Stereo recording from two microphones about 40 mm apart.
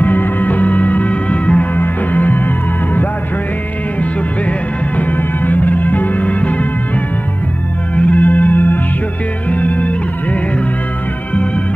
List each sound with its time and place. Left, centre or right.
0.0 s music: left
4.0 s music: left
7.9 s music: left